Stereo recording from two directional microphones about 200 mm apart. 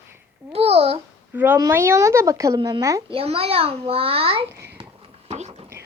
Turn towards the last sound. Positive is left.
turn(degrees=-35)  # may be behind; listen again after turning